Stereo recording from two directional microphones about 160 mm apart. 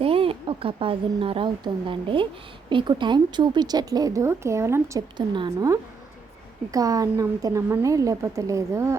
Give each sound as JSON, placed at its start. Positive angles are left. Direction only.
{"t": 0.0, "sound": "a woman's voice", "side_deg": -35}
{"t": 5.1, "sound": "a woman's voice", "side_deg": -30}